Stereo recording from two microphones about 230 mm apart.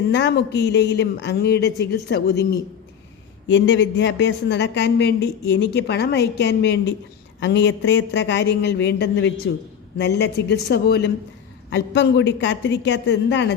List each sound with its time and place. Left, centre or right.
0.1 s speech: left
3.5 s speech: left